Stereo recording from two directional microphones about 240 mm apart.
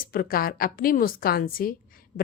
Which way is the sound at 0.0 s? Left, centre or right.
Left.